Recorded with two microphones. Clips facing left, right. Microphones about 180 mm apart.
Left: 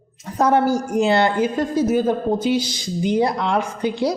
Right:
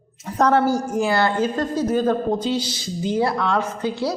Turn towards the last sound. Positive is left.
turn(degrees=15)  # may be behind; listen again after turning